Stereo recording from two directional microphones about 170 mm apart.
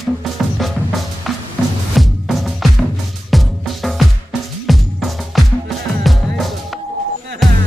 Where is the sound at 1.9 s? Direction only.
Centre (ahead or behind).